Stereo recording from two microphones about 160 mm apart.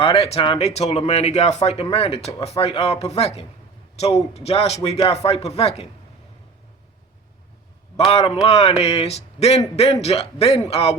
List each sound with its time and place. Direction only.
0.0 s speech: 35° left (ahead or behind)
7.9 s speech: 40° left (ahead or behind)